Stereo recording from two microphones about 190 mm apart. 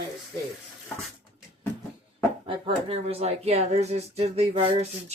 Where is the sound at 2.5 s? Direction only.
30° right (ahead or behind).